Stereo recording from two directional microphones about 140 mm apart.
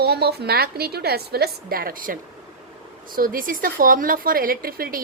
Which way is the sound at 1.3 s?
90° right.